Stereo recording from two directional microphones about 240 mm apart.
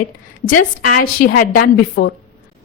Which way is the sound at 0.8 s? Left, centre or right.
Left.